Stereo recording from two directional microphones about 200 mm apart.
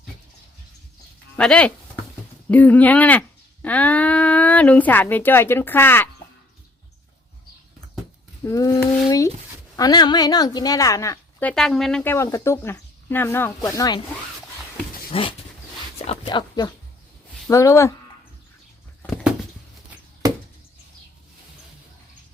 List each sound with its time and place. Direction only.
1.4 s a woman's voice: 5° left (ahead or behind)
8.4 s a woman's voice: 15° left (ahead or behind)
8.8 s speech: 5° left (ahead or behind)
9.0 s a woman's voice: 15° left (ahead or behind)
15.1 s dog: 25° left (ahead or behind)
16.0 s a sound: 25° left (ahead or behind)
17.5 s a woman's voice: 15° left (ahead or behind)
20.2 s chop: 15° right (ahead or behind)